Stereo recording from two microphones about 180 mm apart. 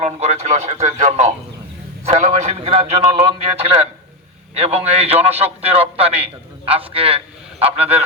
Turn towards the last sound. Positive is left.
turn(degrees=-35)  # may be behind; listen again after turning